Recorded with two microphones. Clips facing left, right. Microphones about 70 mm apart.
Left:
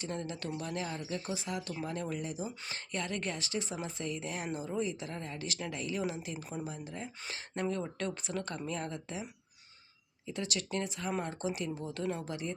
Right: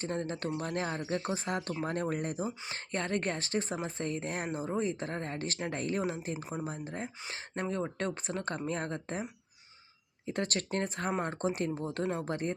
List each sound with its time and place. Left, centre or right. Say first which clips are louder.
0.0 s speech: right 4 dB; right
2.7 s speech: right 4 dB; right
6.3 s speech: right 3 dB; right
6.7 s speech: right 3 dB; right
10.2 s speech: right 4 dB; right